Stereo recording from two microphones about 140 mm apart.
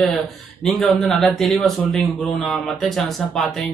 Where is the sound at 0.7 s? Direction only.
Centre (ahead or behind).